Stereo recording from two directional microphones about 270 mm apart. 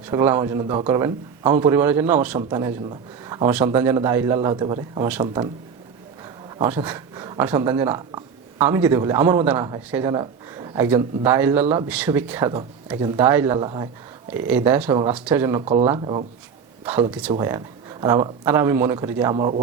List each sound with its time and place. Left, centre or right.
0.0 s speech: centre
6.6 s speech: centre
15.6 s speech: right
16.8 s speech: centre